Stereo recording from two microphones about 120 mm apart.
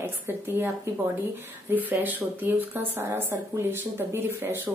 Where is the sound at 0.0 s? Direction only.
20° right (ahead or behind).